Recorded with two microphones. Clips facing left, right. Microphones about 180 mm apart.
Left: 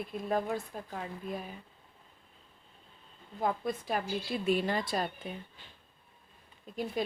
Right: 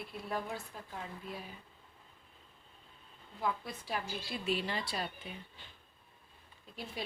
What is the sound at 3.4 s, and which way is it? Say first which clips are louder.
A woman's voice: left 5 dB; 50° left (ahead or behind).